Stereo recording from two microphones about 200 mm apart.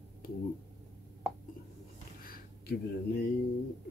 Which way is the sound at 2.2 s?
45° left (ahead or behind).